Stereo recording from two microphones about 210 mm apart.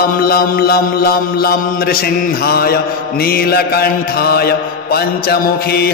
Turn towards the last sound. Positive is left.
turn(degrees=45)  # may be behind; listen again after turning